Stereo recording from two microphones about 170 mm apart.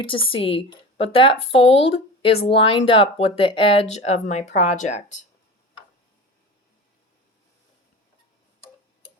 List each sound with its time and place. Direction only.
0.0 s speech: 30° left (ahead or behind)